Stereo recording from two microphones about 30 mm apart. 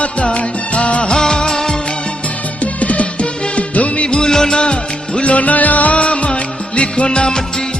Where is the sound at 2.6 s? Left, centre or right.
Left.